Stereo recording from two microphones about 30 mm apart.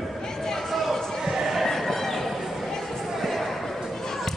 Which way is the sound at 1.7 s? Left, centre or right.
Centre.